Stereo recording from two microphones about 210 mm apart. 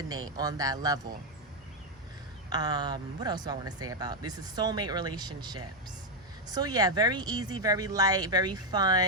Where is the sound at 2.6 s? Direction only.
20° right (ahead or behind).